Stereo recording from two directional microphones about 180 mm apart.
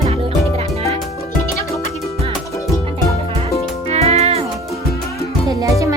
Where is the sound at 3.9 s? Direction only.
35° right (ahead or behind).